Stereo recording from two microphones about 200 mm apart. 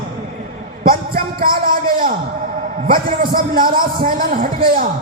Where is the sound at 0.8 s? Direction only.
45° right (ahead or behind).